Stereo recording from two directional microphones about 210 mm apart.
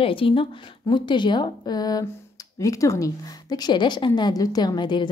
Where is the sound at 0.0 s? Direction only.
25° left (ahead or behind).